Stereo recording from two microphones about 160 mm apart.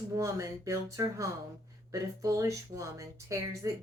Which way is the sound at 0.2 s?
20° right (ahead or behind).